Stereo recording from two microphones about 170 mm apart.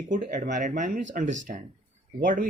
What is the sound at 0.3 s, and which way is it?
Speech, 45° right (ahead or behind).